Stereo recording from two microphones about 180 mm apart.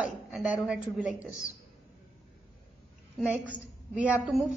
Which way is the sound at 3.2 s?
10° right (ahead or behind).